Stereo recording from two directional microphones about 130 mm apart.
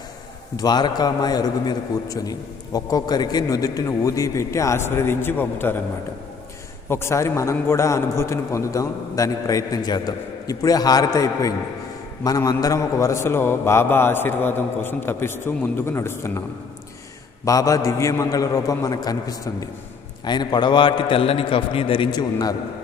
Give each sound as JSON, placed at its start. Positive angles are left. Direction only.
{"t": 0.5, "sound": "a man's voice", "side_deg": 30}
{"t": 6.8, "sound": "a man's voice", "side_deg": 20}
{"t": 17.4, "sound": "a man's voice", "side_deg": 25}